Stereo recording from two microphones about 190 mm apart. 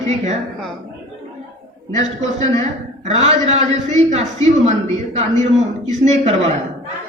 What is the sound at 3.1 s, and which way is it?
A man's voice, 35° right (ahead or behind).